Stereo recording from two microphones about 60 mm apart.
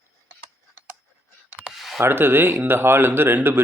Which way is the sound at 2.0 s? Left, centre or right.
Right.